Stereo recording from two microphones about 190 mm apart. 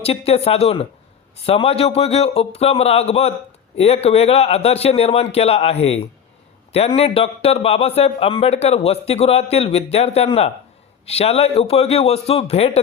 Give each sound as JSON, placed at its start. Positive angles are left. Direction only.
{"t": 0.0, "sound": "a man's voice", "side_deg": 30}